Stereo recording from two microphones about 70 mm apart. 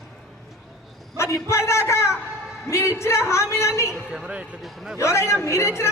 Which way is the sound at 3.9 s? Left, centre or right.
Centre.